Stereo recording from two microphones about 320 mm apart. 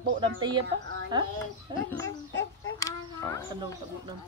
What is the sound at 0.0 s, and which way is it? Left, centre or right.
Speech, right.